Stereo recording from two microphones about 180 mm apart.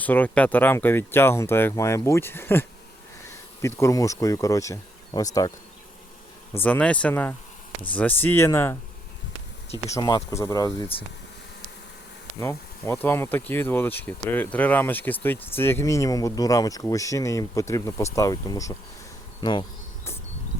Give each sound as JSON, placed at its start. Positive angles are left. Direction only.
{"t": 0.0, "sound": "speech", "side_deg": 10}
{"t": 6.5, "sound": "speech", "side_deg": 10}
{"t": 9.8, "sound": "speech", "side_deg": 20}
{"t": 12.4, "sound": "speech", "side_deg": 15}